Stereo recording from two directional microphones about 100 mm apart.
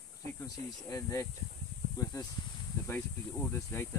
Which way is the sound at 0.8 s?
35° left (ahead or behind).